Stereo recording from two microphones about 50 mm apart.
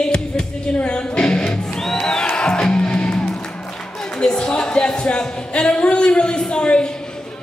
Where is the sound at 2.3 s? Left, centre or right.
Centre.